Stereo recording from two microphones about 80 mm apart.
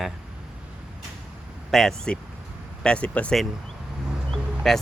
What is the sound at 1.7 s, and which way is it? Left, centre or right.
Speech, centre.